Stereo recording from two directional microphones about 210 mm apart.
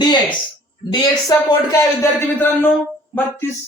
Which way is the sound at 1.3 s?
15° left (ahead or behind).